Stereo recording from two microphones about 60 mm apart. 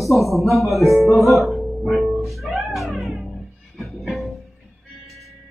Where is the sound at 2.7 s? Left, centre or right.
Centre.